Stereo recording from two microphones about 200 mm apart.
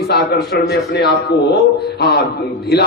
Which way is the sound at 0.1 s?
55° left (ahead or behind).